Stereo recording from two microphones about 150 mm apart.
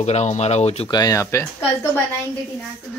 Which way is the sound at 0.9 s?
25° left (ahead or behind).